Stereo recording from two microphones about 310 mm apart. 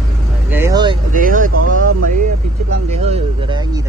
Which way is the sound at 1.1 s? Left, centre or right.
Right.